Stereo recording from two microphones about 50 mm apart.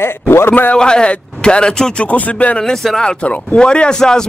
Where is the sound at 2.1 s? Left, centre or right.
Left.